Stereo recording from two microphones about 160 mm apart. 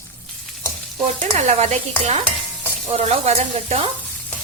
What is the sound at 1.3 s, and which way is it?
Speech, 45° right (ahead or behind).